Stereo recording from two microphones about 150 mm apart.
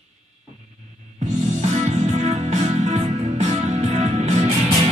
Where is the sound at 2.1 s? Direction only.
50° right (ahead or behind).